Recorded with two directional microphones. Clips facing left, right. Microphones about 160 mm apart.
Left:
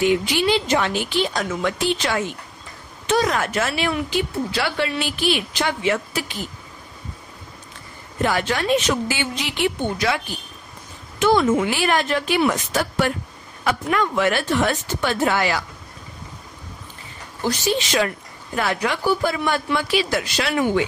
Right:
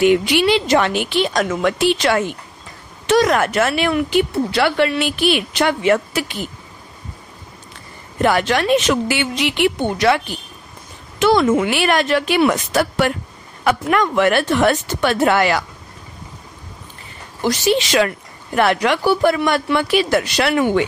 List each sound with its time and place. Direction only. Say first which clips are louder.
0.0 s speech: right 5 dB; 75° right (ahead or behind)
3.1 s speech: right 5 dB; 70° right (ahead or behind); by 6.2 s 55° right (ahead or behind)
8.2 s speech: right 5 dB; 70° right (ahead or behind)
11.1 s speech: right 3 dB; 90° right; by 15.6 s 65° right (ahead or behind)
17.4 s speech: right 5 dB; 85° right; by 20.8 s 65° right (ahead or behind)